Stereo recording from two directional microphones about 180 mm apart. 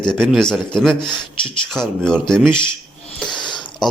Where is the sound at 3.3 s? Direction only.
25° left (ahead or behind).